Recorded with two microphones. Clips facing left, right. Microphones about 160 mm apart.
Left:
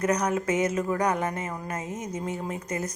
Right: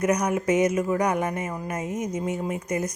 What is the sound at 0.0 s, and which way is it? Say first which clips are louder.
Speech: right 2 dB; 10° right (ahead or behind).